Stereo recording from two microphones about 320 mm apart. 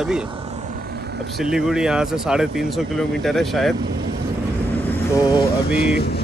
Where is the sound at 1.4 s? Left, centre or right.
Centre.